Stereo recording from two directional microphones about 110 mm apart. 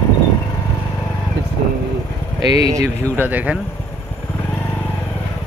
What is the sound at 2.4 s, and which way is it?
Speech, 35° right (ahead or behind).